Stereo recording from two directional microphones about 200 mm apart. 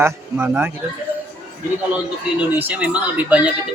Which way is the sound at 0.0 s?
10° right (ahead or behind).